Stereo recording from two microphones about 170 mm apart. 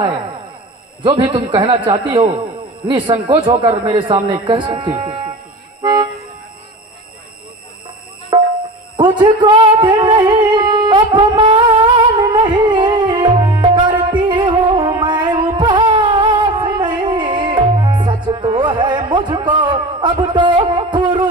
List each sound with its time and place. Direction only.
1.0 s a man's voice: 30° right (ahead or behind)
5.8 s toot: 25° right (ahead or behind)
8.3 s music: 25° right (ahead or behind)
9.0 s a sound: 30° right (ahead or behind)
14.3 s music: 25° right (ahead or behind)